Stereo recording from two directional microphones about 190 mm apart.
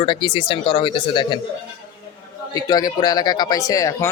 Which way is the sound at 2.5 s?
20° left (ahead or behind).